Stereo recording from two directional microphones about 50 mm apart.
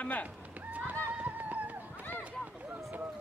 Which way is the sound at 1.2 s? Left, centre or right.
Right.